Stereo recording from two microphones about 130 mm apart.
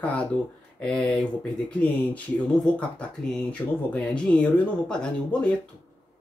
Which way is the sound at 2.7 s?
10° left (ahead or behind).